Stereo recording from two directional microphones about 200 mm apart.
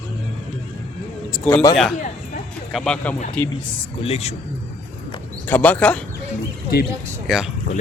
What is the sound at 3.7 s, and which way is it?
Speech, 30° left (ahead or behind).